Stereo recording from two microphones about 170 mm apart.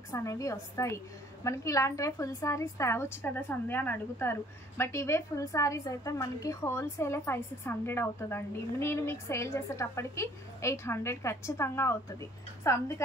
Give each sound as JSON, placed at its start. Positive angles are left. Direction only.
{"t": 0.1, "sound": "a woman's voice", "side_deg": 15}